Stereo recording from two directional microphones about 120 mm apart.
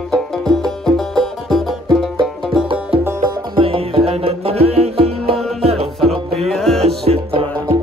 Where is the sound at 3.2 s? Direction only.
50° right (ahead or behind).